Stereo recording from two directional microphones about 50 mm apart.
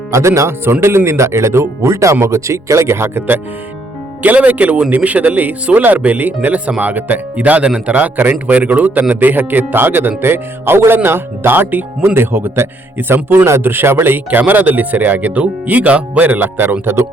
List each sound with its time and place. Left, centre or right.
0.1 s speech: right
4.2 s speech: right
11.7 s speech: right
12.1 s speech: right
16.8 s speech: right